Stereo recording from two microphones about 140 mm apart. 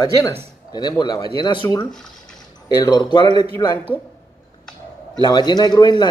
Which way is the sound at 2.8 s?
30° left (ahead or behind).